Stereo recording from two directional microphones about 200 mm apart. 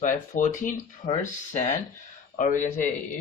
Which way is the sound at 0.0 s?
40° left (ahead or behind).